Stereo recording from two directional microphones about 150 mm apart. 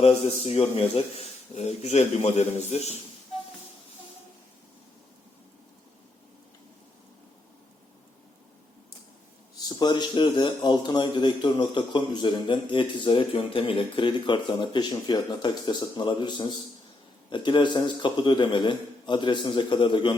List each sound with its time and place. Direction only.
0.3 s speech: 45° left (ahead or behind)
9.6 s speech: 25° left (ahead or behind)